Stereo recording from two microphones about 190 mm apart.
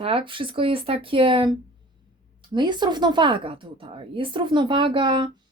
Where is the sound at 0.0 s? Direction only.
30° right (ahead or behind).